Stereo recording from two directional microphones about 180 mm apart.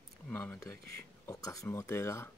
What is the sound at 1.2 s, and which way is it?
Speech, 20° left (ahead or behind).